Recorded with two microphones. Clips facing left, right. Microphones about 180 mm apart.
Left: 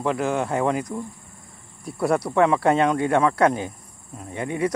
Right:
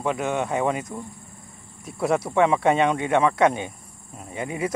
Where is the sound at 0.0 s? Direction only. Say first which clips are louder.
Left 2 dB; centre (ahead or behind).